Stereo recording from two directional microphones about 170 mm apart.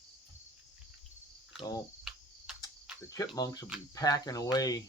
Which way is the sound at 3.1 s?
20° left (ahead or behind).